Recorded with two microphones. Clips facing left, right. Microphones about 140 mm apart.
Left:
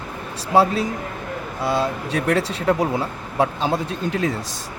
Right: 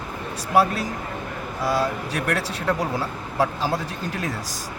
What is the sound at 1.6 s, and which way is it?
Speech, 25° left (ahead or behind).